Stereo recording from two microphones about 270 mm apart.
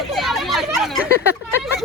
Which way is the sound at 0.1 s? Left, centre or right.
Centre.